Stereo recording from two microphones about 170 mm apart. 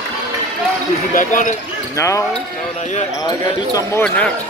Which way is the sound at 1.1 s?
50° left (ahead or behind).